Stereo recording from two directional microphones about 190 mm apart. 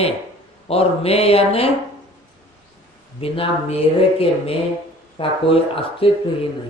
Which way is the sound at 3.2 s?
30° left (ahead or behind).